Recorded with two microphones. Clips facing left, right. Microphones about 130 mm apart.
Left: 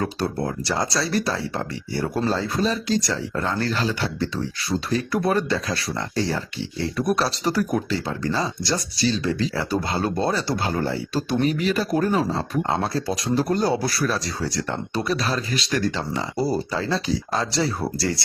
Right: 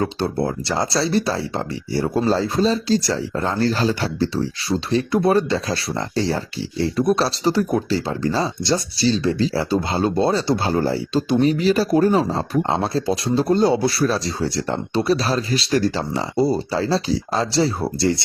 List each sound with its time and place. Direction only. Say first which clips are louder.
0.2 s speech: right 3 dB; 30° right (ahead or behind)
16.7 s speech: right 4 dB; 35° right (ahead or behind)